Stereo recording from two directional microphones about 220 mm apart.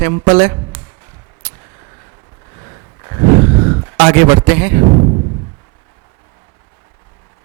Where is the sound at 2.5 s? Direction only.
20° right (ahead or behind).